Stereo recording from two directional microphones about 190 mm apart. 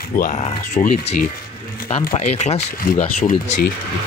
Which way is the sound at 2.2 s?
35° left (ahead or behind).